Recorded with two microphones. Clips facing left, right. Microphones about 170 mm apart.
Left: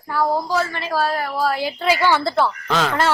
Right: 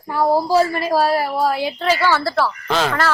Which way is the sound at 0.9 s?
35° right (ahead or behind).